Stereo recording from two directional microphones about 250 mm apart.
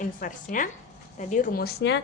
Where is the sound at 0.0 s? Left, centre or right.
Left.